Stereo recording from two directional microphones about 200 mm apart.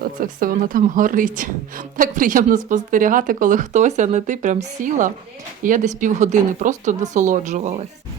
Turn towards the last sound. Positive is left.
turn(degrees=-35)  # may be behind; listen again after turning